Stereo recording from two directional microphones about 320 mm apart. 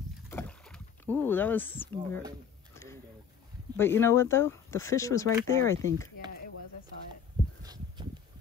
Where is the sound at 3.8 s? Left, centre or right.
Centre.